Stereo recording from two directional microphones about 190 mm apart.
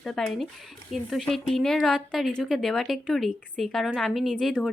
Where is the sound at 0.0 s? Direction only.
Centre (ahead or behind).